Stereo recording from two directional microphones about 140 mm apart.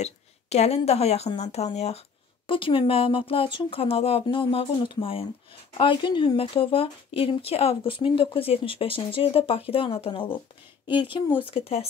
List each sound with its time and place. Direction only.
0.0 s speech: 50° left (ahead or behind)
2.4 s speech: 40° left (ahead or behind)